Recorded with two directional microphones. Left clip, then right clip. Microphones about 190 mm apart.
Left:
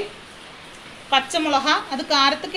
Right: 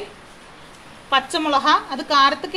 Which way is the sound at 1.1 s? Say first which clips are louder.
Right 1 dB; 55° right (ahead or behind).